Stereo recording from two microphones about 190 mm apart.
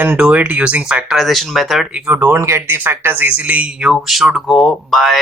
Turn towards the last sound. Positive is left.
turn(degrees=0)  # may be behind; listen again after turning